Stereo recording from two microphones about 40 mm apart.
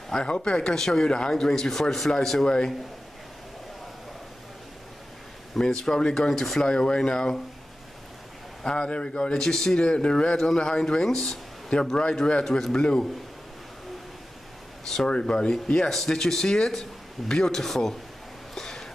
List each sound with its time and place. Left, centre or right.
0.1 s speech: left
2.4 s speech: centre
5.6 s speech: centre
6.6 s speech: centre
8.6 s speech: left
12.4 s speech: centre
12.7 s speech: left
15.0 s speech: centre
18.5 s a sound: centre